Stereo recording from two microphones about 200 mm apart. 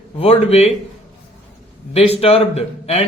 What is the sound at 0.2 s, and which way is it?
Speech, 30° left (ahead or behind).